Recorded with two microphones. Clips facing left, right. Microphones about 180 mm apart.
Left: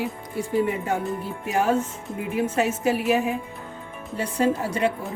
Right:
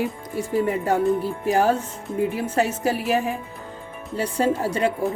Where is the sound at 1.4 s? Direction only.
35° right (ahead or behind).